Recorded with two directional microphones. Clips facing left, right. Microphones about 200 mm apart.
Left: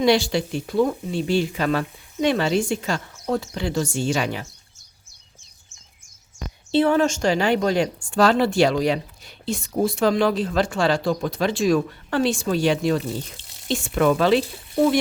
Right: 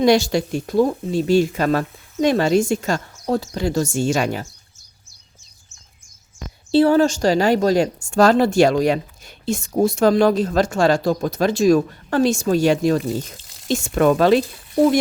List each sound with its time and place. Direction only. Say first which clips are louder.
0.0 s speech: right 3 dB; 45° right (ahead or behind)
6.7 s a woman's voice: right 4 dB; 35° right (ahead or behind)